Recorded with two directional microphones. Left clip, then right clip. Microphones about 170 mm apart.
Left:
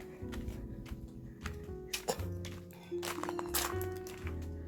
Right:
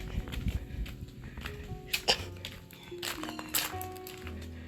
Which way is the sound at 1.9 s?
5° left (ahead or behind).